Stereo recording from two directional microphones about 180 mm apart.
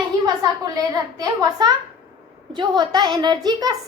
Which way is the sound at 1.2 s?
20° right (ahead or behind).